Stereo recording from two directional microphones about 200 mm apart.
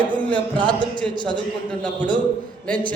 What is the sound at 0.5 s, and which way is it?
Speech, 20° right (ahead or behind).